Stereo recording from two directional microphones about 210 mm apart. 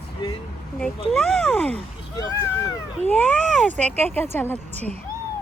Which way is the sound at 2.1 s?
15° left (ahead or behind).